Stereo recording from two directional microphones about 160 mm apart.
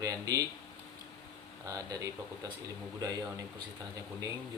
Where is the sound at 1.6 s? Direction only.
20° right (ahead or behind).